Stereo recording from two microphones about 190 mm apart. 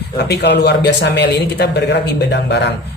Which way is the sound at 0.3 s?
60° left (ahead or behind).